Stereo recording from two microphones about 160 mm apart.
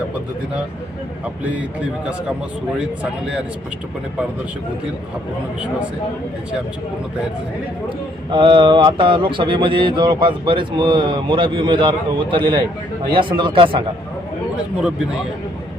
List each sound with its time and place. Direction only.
1.5 s a man's voice: 10° right (ahead or behind)
8.3 s speech: 30° right (ahead or behind)